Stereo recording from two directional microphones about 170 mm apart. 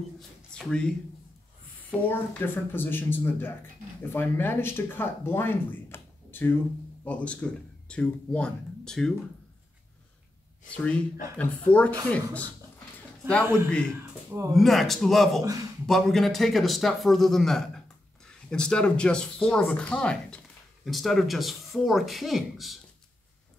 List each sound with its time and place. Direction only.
0.6 s a man's voice: 5° left (ahead or behind)
10.7 s speech: 5° left (ahead or behind)
13.7 s a man's voice: 5° left (ahead or behind)
13.9 s speech: 15° right (ahead or behind)
14.5 s a man's voice: centre (ahead or behind)